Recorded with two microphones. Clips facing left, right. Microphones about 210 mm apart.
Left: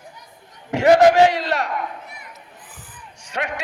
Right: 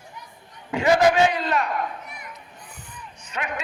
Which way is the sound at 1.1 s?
75° left (ahead or behind).